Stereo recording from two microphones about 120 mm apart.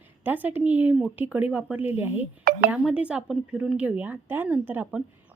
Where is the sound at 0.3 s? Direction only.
15° right (ahead or behind).